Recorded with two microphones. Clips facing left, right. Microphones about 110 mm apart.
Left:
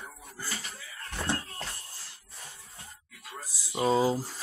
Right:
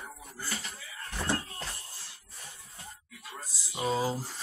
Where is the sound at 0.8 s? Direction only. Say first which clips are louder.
Left 1 dB; 15° right (ahead or behind).